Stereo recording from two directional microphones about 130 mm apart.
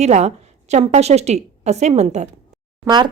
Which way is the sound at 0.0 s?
60° right (ahead or behind).